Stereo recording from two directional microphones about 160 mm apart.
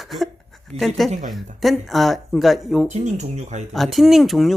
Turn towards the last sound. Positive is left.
turn(degrees=0)  # may be behind; listen again after turning